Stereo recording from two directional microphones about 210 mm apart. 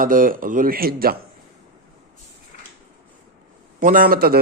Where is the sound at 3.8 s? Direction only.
40° right (ahead or behind).